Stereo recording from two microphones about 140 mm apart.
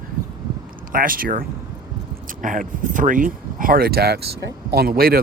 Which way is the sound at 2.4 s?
70° right (ahead or behind).